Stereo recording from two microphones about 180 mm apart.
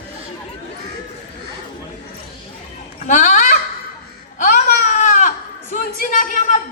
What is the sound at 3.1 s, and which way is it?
Fowl, 45° left (ahead or behind).